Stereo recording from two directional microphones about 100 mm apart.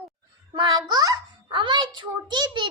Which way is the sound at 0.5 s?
45° right (ahead or behind).